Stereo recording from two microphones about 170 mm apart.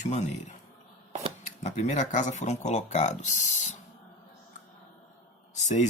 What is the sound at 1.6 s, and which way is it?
Speech, 45° left (ahead or behind).